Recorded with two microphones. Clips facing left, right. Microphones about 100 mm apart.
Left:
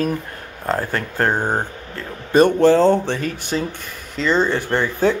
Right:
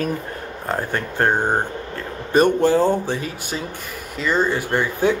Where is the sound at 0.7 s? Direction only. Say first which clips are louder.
Left 2 dB; 20° right (ahead or behind).